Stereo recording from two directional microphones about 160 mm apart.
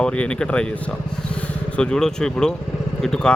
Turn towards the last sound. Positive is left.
turn(degrees=5)  # may be behind; listen again after turning